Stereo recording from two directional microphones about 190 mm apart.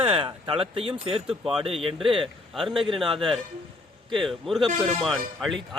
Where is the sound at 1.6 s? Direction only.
30° right (ahead or behind).